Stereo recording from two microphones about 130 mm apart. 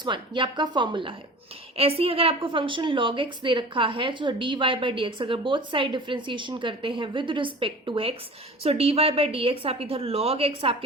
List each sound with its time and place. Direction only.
0.0 s a woman's voice: 35° right (ahead or behind)
1.7 s a woman's voice: 50° right (ahead or behind)